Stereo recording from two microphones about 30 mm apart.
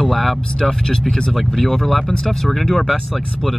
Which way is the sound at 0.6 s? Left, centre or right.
Left.